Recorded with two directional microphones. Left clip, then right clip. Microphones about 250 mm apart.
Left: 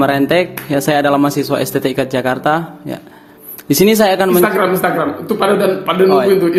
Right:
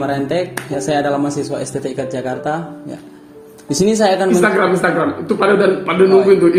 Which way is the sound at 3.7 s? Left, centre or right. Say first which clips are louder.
Left 3 dB; left.